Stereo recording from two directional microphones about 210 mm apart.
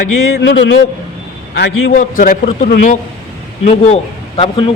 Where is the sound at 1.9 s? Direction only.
40° left (ahead or behind).